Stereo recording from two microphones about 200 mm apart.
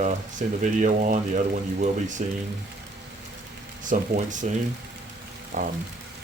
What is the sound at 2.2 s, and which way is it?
Speech, 40° right (ahead or behind).